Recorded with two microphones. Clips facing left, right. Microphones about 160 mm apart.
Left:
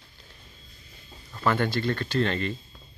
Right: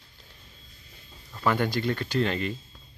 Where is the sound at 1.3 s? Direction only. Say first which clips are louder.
Even; 10° right (ahead or behind).